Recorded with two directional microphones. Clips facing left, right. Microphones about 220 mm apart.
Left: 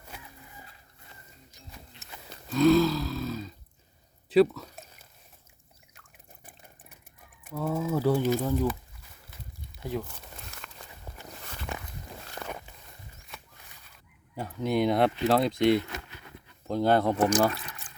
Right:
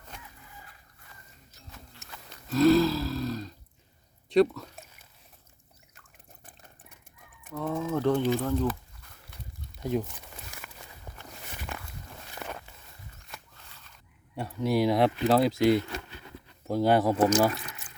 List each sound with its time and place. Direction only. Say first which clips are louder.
0.1 s chicken: left 1 dB; 5° left (ahead or behind)
2.0 s a sound: right 1 dB; 20° left (ahead or behind)
2.5 s a sound: even; centre (ahead or behind)
7.5 s speech: left 1 dB; 5° left (ahead or behind)
9.8 s crumpling: right 4 dB; 20° right (ahead or behind)
11.1 s walk: left 1 dB; 5° left (ahead or behind)
12.5 s walk: left 1 dB; 10° left (ahead or behind)
13.7 s fowl: right 1 dB; 15° left (ahead or behind)
14.3 s speech: right 1 dB; centre (ahead or behind)